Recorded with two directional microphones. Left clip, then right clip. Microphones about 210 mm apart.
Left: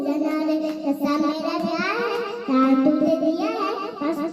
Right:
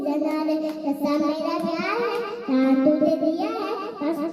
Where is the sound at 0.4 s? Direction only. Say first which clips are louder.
Left 1 dB; 35° left (ahead or behind).